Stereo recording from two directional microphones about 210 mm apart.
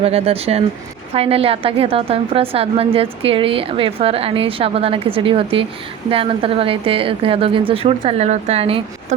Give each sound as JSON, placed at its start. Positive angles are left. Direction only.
{"t": 0.0, "sound": "a woman's voice", "side_deg": -30}